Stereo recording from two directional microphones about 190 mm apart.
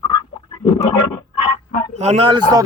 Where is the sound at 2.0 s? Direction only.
35° right (ahead or behind).